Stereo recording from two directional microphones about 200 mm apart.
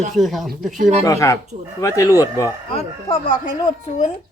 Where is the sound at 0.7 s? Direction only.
40° right (ahead or behind).